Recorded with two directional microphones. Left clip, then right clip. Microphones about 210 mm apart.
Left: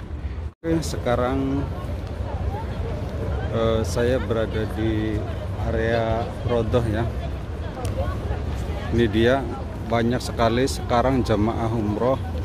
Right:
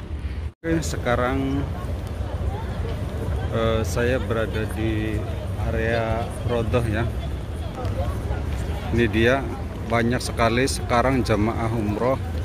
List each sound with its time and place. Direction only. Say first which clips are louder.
0.7 s speech: even; 5° left (ahead or behind)
3.5 s speech: left 1 dB; 10° left (ahead or behind)
8.9 s speech: even; 10° left (ahead or behind)